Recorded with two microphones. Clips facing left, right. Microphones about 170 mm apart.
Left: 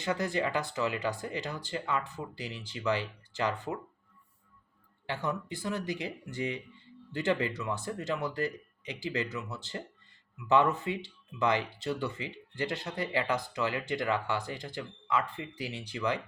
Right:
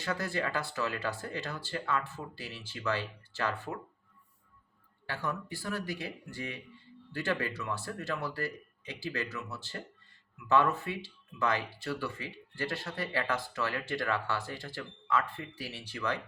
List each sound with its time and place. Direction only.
0.0 s speech: 20° left (ahead or behind)
5.0 s speech: 20° left (ahead or behind)